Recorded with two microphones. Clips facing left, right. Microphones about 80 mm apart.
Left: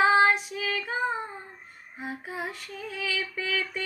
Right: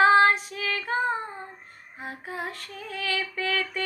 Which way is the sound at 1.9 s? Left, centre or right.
Right.